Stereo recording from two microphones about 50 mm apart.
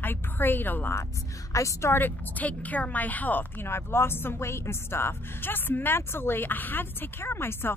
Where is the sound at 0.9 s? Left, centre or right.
Left.